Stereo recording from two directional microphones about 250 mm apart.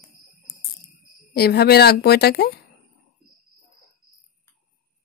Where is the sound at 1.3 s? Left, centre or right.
Left.